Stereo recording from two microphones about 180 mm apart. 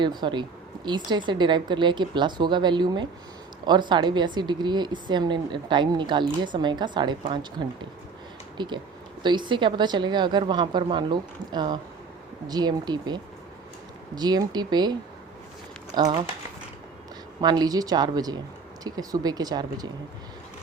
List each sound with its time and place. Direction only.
0.0 s speech: 25° right (ahead or behind)
8.5 s speech: 25° right (ahead or behind)
16.0 s speech: 20° right (ahead or behind)
17.4 s speech: 20° right (ahead or behind)